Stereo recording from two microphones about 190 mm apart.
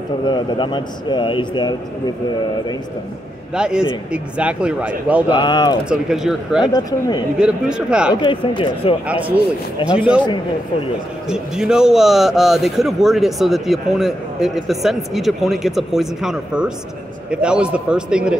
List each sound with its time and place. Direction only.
0.3 s a man's voice: 25° left (ahead or behind)
3.5 s a man's voice: 5° right (ahead or behind)
5.4 s a man's voice: 25° left (ahead or behind)
5.9 s a man's voice: centre (ahead or behind)
6.7 s a man's voice: 20° left (ahead or behind)
7.3 s a man's voice: 5° right (ahead or behind)
8.1 s a man's voice: 25° left (ahead or behind)
9.0 s a man's voice: 5° right (ahead or behind)
11.2 s a man's voice: 5° right (ahead or behind)